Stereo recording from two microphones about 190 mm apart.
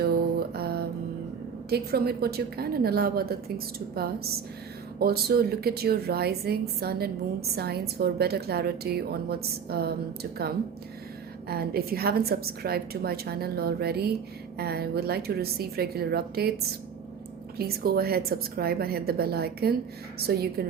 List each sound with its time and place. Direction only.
0.0 s mantra: 55° right (ahead or behind)
1.7 s a woman's voice: 55° right (ahead or behind)
17.6 s a woman's voice: 55° right (ahead or behind)